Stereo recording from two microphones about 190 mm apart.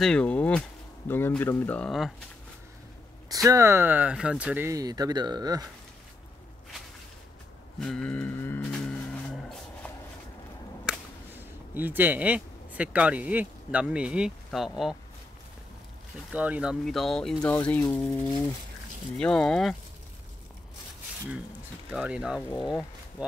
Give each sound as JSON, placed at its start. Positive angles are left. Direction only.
{"t": 0.0, "sound": "speech", "side_deg": 5}
{"t": 3.4, "sound": "speech", "side_deg": -15}
{"t": 7.8, "sound": "livestock", "side_deg": 5}
{"t": 10.9, "sound": "speech", "side_deg": -10}
{"t": 16.3, "sound": "speech", "side_deg": -5}
{"t": 19.1, "sound": "speech", "side_deg": 5}
{"t": 21.9, "sound": "speech", "side_deg": -5}